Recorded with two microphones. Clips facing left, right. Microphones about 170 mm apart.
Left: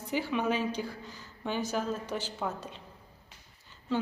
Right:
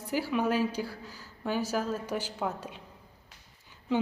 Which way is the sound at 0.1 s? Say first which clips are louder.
Right 2 dB; 5° right (ahead or behind).